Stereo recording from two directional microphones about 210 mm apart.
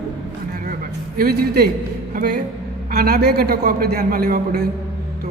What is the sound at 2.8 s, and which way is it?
A man's voice, 45° right (ahead or behind).